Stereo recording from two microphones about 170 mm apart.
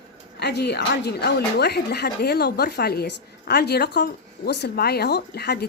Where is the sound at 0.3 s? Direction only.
75° left (ahead or behind).